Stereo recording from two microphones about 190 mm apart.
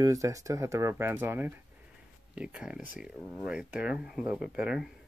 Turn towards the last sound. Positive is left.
turn(degrees=-5)  # may be behind; listen again after turning